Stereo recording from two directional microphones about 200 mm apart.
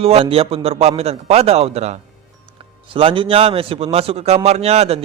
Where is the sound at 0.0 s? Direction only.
30° right (ahead or behind).